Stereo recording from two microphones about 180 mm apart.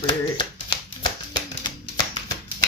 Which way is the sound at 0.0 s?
25° left (ahead or behind).